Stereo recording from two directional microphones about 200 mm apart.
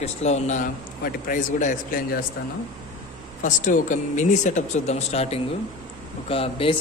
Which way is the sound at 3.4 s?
40° left (ahead or behind).